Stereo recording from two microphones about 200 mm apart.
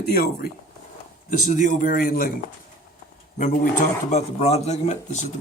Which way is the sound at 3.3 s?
40° left (ahead or behind).